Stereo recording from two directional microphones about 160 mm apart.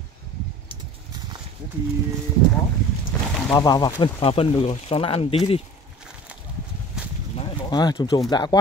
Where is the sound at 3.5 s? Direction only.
20° left (ahead or behind).